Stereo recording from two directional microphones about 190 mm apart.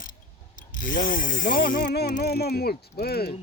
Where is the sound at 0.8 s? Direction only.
45° left (ahead or behind).